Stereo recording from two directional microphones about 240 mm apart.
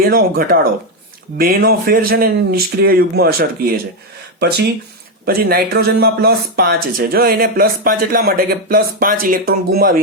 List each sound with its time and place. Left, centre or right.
0.0 s speech: right